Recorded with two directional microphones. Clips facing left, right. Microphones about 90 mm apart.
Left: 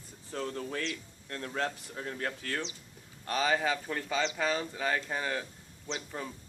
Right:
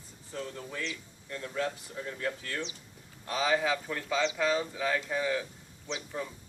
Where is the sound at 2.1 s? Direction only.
55° left (ahead or behind).